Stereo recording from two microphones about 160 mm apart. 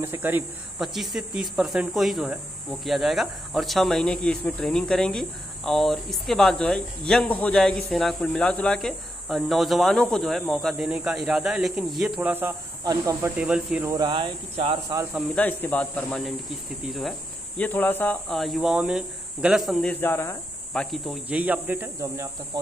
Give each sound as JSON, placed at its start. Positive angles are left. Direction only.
{"t": 0.0, "sound": "speech", "side_deg": -15}
{"t": 12.2, "sound": "speech", "side_deg": -10}
{"t": 13.4, "sound": "speech", "side_deg": -5}
{"t": 13.8, "sound": "speech", "side_deg": -25}
{"t": 15.3, "sound": "speech", "side_deg": 10}
{"t": 17.6, "sound": "speech", "side_deg": 10}
{"t": 18.3, "sound": "speech", "side_deg": 0}
{"t": 20.7, "sound": "speech", "side_deg": 0}